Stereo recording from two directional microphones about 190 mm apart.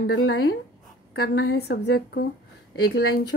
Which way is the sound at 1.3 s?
75° left (ahead or behind).